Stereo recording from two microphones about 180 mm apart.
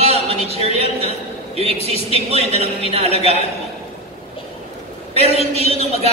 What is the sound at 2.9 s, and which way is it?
Speech, 35° right (ahead or behind).